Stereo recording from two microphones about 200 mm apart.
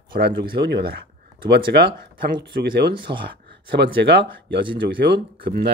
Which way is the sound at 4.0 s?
60° right (ahead or behind).